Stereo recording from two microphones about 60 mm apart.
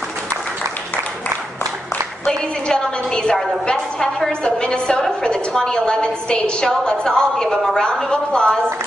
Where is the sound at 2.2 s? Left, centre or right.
Centre.